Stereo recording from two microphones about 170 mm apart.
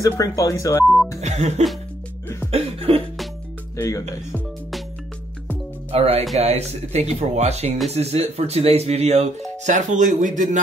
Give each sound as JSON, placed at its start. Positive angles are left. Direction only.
{"t": 0.0, "sound": "speech", "side_deg": 20}
{"t": 1.2, "sound": "speech", "side_deg": -40}
{"t": 2.5, "sound": "cough", "side_deg": -35}
{"t": 3.7, "sound": "speech", "side_deg": 15}
{"t": 5.9, "sound": "speech", "side_deg": -35}